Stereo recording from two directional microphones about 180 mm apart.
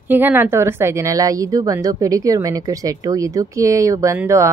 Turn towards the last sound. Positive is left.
turn(degrees=-15)  # may be behind; listen again after turning